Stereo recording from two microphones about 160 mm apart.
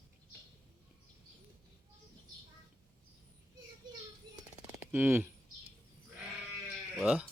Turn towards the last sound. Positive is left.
turn(degrees=0)  # may be behind; listen again after turning